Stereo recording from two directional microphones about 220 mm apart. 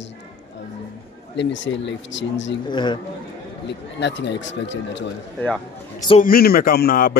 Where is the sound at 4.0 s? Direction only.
50° left (ahead or behind).